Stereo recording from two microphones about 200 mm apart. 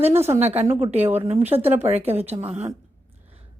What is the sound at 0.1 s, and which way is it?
Speech, 10° right (ahead or behind).